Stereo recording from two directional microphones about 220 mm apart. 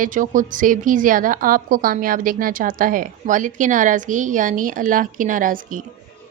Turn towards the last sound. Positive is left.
turn(degrees=-35)  # may be behind; listen again after turning